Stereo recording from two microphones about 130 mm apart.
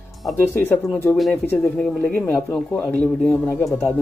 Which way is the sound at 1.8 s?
15° left (ahead or behind).